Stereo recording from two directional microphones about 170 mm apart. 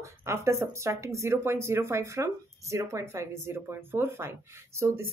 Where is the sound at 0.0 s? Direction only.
15° right (ahead or behind).